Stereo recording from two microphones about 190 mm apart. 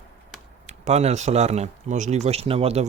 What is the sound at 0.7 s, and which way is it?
Speech, 35° right (ahead or behind).